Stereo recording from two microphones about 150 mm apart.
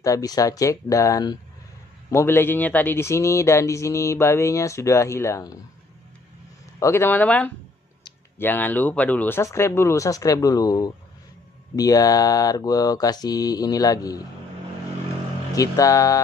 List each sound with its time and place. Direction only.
0.0 s speech: 25° left (ahead or behind)
6.8 s speech: 15° left (ahead or behind)
15.5 s speech: 20° left (ahead or behind)